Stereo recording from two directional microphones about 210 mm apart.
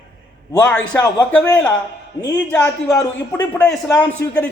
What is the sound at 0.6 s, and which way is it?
A man's voice, 5° left (ahead or behind).